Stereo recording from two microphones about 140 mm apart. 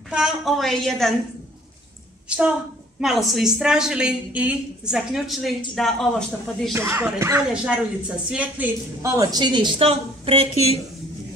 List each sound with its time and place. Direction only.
0.1 s a woman's voice: 5° right (ahead or behind)
2.2 s a woman's voice: 10° right (ahead or behind)
6.7 s speech: 20° right (ahead or behind); by 10.5 s 40° right (ahead or behind)